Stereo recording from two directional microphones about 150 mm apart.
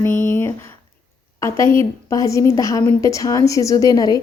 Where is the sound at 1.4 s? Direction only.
20° left (ahead or behind).